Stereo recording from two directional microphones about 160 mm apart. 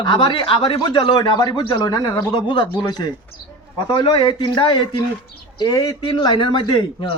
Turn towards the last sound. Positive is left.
turn(degrees=30)  # may be behind; listen again after turning